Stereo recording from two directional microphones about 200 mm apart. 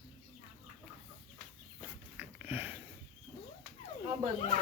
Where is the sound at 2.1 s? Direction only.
10° right (ahead or behind).